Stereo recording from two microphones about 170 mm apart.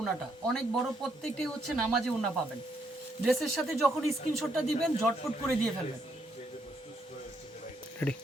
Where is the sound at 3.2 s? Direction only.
Centre (ahead or behind).